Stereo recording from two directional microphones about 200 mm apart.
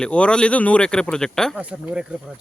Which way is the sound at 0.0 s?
5° left (ahead or behind).